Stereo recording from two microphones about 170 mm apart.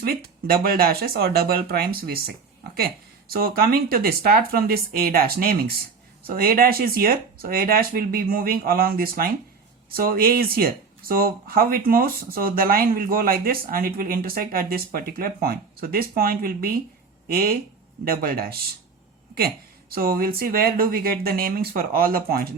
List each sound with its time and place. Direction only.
0.0 s speech: 60° right (ahead or behind)
19.9 s speech: 60° right (ahead or behind)